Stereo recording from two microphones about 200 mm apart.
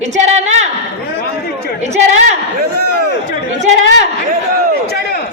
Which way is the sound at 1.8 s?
35° right (ahead or behind).